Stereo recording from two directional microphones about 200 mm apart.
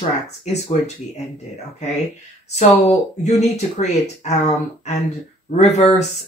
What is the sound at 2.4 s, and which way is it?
Speech, 35° left (ahead or behind).